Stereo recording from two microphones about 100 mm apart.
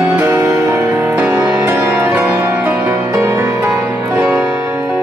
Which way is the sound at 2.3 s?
30° right (ahead or behind).